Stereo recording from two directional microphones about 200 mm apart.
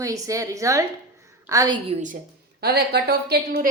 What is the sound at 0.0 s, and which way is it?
A woman's voice, 15° right (ahead or behind).